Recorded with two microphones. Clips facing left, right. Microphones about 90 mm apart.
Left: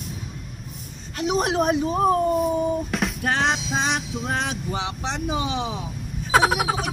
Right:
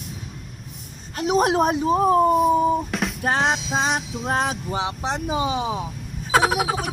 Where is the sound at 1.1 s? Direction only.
40° right (ahead or behind).